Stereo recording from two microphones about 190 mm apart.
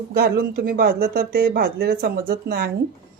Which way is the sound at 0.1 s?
55° right (ahead or behind).